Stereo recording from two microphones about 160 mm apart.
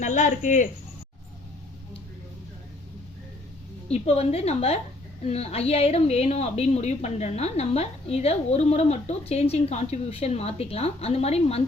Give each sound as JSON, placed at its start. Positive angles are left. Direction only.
{"t": 0.0, "sound": "speech", "side_deg": 50}
{"t": 3.8, "sound": "a woman's voice", "side_deg": 40}